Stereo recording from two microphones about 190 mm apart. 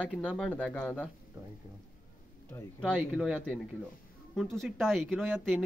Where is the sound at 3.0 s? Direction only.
5° right (ahead or behind).